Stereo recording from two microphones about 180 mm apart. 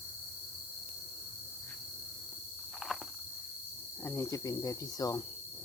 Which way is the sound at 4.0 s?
15° left (ahead or behind).